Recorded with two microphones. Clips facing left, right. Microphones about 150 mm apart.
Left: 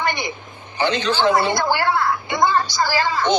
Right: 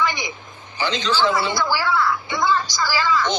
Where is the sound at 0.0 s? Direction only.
55° left (ahead or behind).